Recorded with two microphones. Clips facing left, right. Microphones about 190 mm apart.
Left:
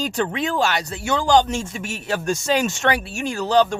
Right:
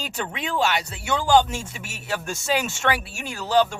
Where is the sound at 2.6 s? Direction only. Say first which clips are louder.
Left 4 dB; 40° left (ahead or behind).